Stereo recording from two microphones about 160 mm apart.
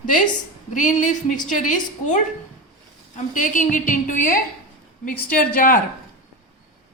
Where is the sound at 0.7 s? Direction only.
50° left (ahead or behind).